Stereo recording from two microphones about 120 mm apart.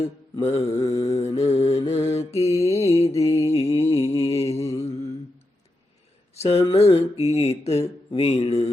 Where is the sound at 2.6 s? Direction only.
60° left (ahead or behind).